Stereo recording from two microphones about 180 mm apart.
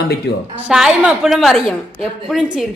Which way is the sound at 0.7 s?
5° right (ahead or behind).